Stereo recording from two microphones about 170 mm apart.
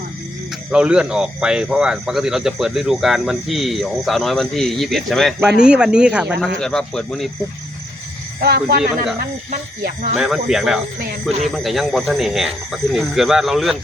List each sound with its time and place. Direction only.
0.7 s speech: 5° right (ahead or behind)
8.4 s speech: 65° right (ahead or behind)
9.5 s speech: 50° right (ahead or behind)
10.2 s speech: 5° right (ahead or behind)